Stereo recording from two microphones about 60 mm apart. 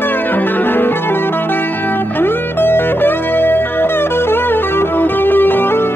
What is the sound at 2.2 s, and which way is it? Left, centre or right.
Music, left.